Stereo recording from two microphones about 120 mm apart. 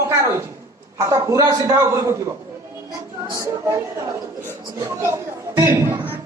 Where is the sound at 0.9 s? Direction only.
25° right (ahead or behind).